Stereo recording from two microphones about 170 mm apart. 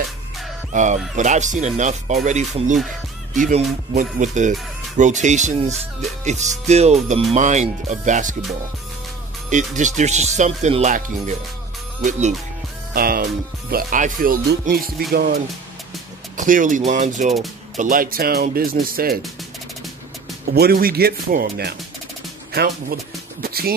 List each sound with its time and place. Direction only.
0.7 s speech: 50° right (ahead or behind)
9.5 s speech: 45° right (ahead or behind)
12.9 s speech: 60° right (ahead or behind)
16.3 s speech: 50° right (ahead or behind)
20.5 s speech: 65° right (ahead or behind)